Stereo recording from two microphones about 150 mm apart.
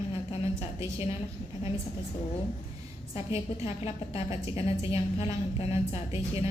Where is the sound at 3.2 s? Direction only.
40° left (ahead or behind).